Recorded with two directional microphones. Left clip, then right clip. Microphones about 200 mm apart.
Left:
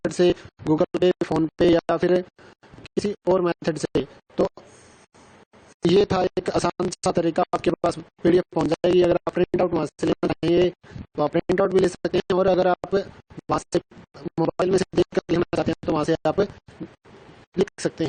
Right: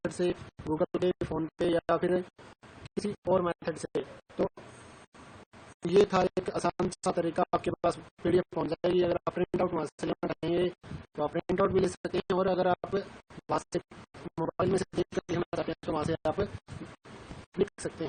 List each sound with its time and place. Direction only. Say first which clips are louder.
0.2 s speech: left 14 dB; 45° left (ahead or behind)
6.0 s speech: even; 40° left (ahead or behind)
17.6 s speech: left 8 dB; 45° left (ahead or behind)